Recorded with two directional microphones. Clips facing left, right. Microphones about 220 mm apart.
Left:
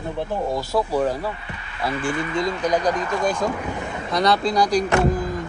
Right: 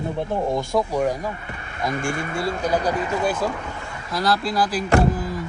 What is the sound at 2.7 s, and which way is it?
A man's voice, 10° right (ahead or behind).